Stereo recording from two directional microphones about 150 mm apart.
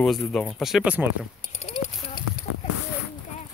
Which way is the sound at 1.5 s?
45° left (ahead or behind).